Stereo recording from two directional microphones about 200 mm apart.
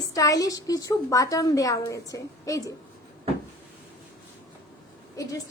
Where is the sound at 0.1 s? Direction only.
15° left (ahead or behind).